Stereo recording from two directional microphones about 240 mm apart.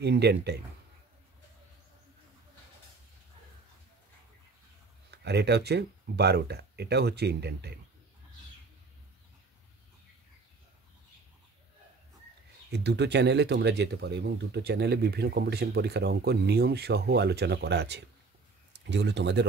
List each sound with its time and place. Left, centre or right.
0.0 s speech: right
5.1 s speech: right
12.7 s speech: right